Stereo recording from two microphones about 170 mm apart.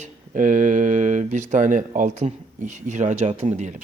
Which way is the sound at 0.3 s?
50° right (ahead or behind).